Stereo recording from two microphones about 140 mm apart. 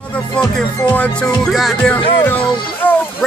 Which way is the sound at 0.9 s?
10° left (ahead or behind).